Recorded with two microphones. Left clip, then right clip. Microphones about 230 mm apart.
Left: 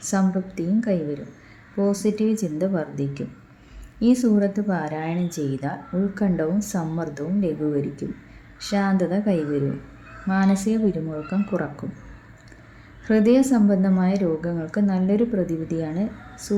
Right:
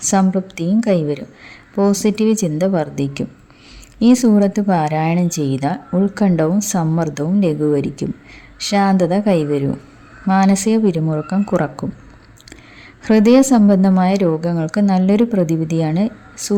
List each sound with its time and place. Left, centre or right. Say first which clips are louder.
0.0 s speech: right 8 dB; right
13.1 s speech: right 7 dB; right